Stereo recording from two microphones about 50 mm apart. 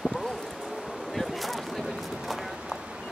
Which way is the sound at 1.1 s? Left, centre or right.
Centre.